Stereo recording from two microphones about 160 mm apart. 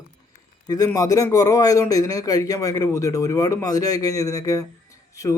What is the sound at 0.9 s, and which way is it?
A man's voice, 20° left (ahead or behind).